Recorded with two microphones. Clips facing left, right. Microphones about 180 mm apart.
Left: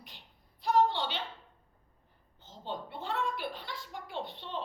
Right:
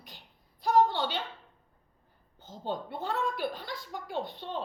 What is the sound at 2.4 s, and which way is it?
A woman's voice, 40° right (ahead or behind).